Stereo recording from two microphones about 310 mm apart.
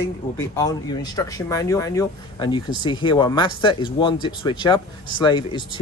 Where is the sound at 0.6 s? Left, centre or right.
Centre.